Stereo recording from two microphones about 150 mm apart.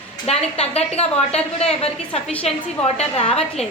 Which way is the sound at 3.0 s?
40° left (ahead or behind).